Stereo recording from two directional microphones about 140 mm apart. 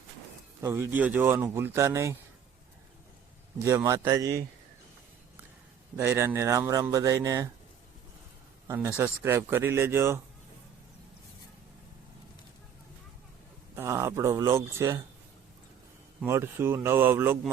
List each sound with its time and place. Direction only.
0.6 s speech: 15° right (ahead or behind)
3.6 s speech: 20° right (ahead or behind)
6.0 s speech: 20° right (ahead or behind)
8.6 s speech: 20° right (ahead or behind)
13.7 s speech: 20° right (ahead or behind)
16.2 s speech: 15° right (ahead or behind)